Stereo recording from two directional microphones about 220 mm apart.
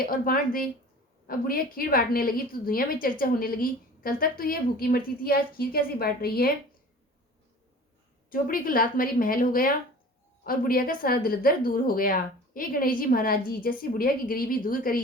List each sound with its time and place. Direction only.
0.0 s a woman's voice: 40° left (ahead or behind)
8.3 s a woman's voice: 40° left (ahead or behind)